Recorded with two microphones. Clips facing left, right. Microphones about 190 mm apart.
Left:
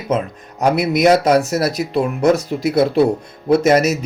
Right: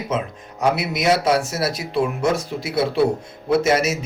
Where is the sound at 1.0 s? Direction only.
40° left (ahead or behind).